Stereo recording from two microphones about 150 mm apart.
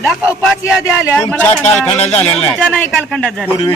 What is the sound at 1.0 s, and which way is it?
Speech, 20° left (ahead or behind).